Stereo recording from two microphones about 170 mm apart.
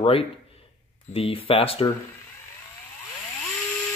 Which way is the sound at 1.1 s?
35° left (ahead or behind).